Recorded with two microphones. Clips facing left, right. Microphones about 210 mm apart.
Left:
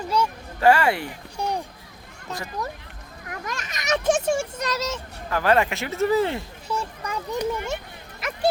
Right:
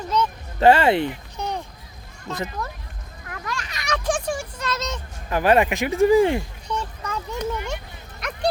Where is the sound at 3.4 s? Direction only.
20° left (ahead or behind).